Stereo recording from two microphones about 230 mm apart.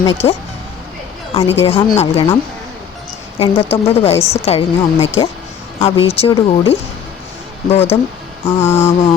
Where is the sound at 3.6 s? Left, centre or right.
Left.